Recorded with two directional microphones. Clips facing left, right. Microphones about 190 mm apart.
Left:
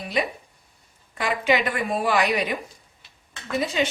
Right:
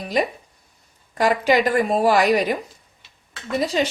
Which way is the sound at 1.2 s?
40° right (ahead or behind).